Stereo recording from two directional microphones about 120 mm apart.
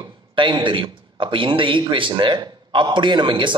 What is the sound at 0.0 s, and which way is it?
A man's voice, 40° right (ahead or behind).